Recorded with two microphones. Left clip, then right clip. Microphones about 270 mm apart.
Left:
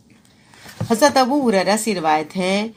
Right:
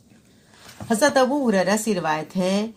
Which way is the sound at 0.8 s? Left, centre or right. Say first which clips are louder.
Left 3 dB; centre.